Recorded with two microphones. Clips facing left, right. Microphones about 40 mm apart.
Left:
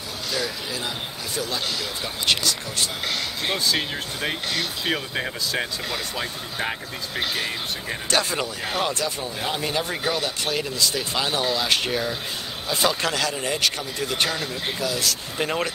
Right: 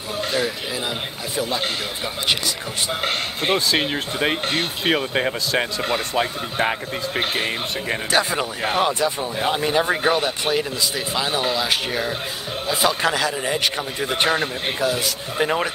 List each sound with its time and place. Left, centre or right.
1.3 s speech: right
3.0 s speech: right
8.1 s a man's voice: centre
10.5 s a man's voice: centre
14.3 s speech: right
15.0 s a man's voice: centre